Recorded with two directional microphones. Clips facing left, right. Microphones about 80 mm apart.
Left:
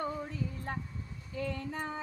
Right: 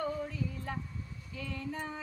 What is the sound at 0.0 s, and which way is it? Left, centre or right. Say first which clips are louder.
Music: right 1 dB; left.